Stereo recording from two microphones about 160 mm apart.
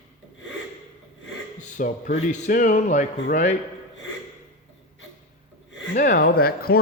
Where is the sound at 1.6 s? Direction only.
50° left (ahead or behind).